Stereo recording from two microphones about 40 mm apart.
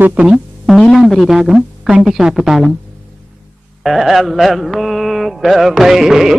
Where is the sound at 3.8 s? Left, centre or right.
Centre.